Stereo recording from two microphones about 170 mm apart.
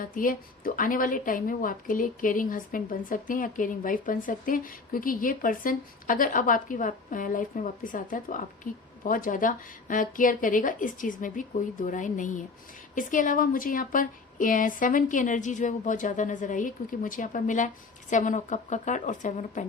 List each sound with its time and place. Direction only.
0.0 s a woman's voice: 55° left (ahead or behind)